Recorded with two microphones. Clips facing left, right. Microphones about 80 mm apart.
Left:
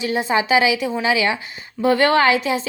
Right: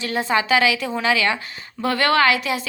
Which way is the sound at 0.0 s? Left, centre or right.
Centre.